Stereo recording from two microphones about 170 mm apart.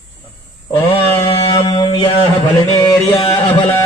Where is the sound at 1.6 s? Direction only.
30° left (ahead or behind).